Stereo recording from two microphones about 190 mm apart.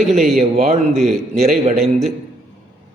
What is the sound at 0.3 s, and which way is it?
Speech, 40° right (ahead or behind).